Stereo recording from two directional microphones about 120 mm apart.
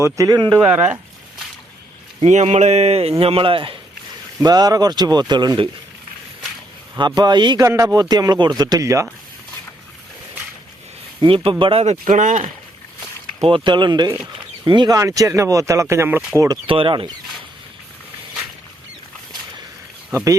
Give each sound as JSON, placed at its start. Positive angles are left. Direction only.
{"t": 0.0, "sound": "speech", "side_deg": -25}
{"t": 0.5, "sound": "speech", "side_deg": -15}
{"t": 2.2, "sound": "a man's voice", "side_deg": -70}
{"t": 4.4, "sound": "speech", "side_deg": -35}
{"t": 6.9, "sound": "speech", "side_deg": -40}
{"t": 7.6, "sound": "speech", "side_deg": -25}
{"t": 11.2, "sound": "speech", "side_deg": -40}
{"t": 11.9, "sound": "speech", "side_deg": -90}
{"t": 13.4, "sound": "speech", "side_deg": -45}
{"t": 16.6, "sound": "speech", "side_deg": -45}